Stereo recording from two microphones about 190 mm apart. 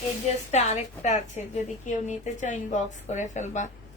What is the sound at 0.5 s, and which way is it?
A woman's voice, 35° left (ahead or behind).